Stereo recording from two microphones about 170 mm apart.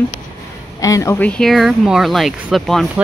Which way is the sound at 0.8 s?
20° left (ahead or behind).